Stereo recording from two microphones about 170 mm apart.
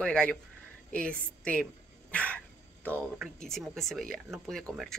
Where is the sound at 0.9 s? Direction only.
5° left (ahead or behind).